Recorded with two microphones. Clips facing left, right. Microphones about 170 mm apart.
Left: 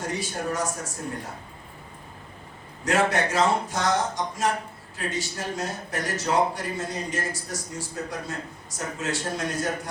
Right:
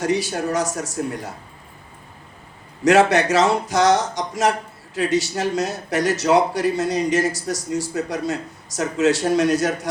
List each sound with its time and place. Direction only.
0.0 s speech: 75° right (ahead or behind)
2.8 s speech: 75° right (ahead or behind)